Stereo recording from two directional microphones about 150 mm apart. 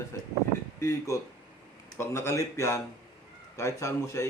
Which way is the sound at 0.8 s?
20° left (ahead or behind).